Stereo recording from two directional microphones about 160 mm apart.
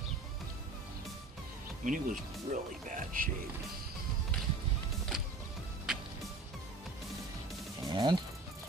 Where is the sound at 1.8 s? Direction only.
55° right (ahead or behind).